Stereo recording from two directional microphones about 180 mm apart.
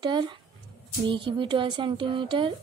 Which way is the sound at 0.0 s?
25° right (ahead or behind).